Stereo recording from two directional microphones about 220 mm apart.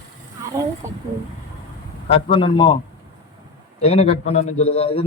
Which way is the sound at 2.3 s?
25° left (ahead or behind).